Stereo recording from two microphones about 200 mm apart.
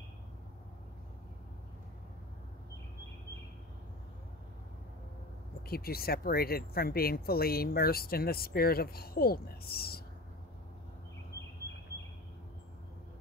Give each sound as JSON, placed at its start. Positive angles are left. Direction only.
{"t": 5.7, "sound": "speech", "side_deg": 50}